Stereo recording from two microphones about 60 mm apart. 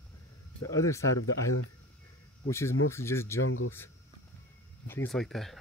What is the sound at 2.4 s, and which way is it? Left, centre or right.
Speech, left.